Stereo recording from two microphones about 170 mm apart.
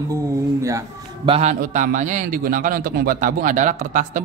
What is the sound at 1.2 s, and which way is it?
Speech, 35° right (ahead or behind).